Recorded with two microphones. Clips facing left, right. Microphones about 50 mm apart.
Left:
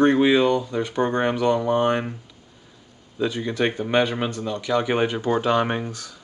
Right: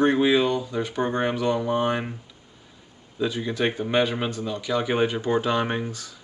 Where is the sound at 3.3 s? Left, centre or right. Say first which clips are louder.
Left 2 dB; centre.